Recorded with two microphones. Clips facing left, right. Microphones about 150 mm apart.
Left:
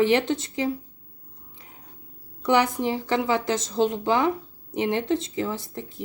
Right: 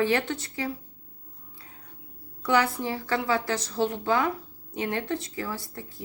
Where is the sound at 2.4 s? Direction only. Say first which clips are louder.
Left 3 dB; 20° left (ahead or behind).